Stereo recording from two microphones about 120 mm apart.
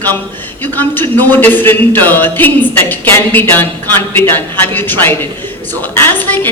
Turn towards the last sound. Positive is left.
turn(degrees=15)  # may be behind; listen again after turning